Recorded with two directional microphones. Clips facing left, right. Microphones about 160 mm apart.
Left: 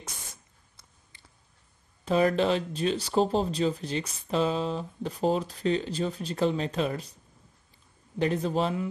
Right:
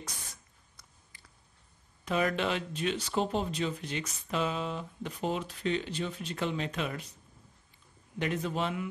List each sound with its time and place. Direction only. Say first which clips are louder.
2.0 s speech: left 6 dB; 35° left (ahead or behind)
8.2 s speech: left 6 dB; 35° left (ahead or behind)